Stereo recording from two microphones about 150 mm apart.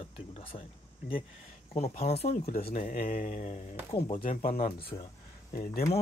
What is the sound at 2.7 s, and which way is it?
Mantra, 65° left (ahead or behind).